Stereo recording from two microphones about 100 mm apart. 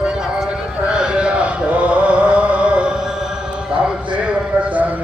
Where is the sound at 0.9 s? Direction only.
10° right (ahead or behind).